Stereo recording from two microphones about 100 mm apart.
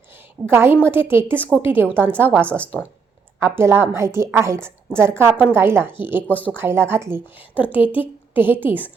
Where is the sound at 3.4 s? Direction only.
25° right (ahead or behind).